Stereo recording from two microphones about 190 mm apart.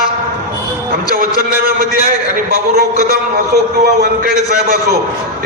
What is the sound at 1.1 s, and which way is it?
A man's voice, 50° right (ahead or behind).